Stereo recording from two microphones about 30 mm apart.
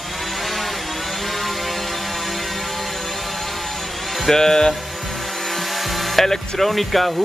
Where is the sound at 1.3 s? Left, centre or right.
Centre.